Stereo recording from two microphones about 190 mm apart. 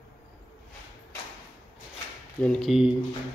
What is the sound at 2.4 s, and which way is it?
Speech, 5° left (ahead or behind).